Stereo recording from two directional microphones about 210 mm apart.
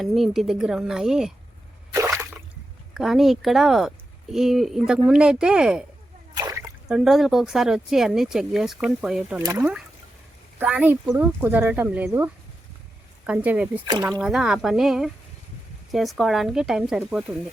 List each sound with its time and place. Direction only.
0.0 s speech: centre (ahead or behind)
1.9 s a sound: 15° right (ahead or behind)
2.9 s speech: centre (ahead or behind)
6.3 s splash: 15° right (ahead or behind)
6.8 s speech: centre (ahead or behind)